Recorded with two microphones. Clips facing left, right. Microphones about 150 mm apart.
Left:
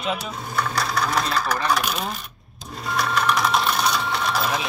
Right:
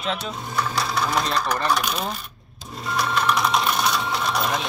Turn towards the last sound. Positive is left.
turn(degrees=0)  # may be behind; listen again after turning